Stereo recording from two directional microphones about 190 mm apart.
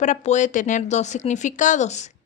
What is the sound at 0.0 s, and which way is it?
Speech, 40° left (ahead or behind).